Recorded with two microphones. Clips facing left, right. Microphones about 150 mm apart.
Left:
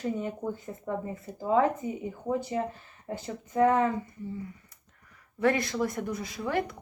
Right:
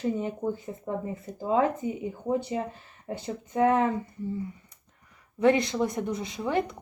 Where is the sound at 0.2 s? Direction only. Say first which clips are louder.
Right 3 dB; 20° right (ahead or behind).